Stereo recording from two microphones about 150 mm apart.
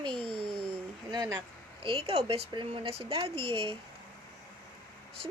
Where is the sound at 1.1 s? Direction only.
25° right (ahead or behind).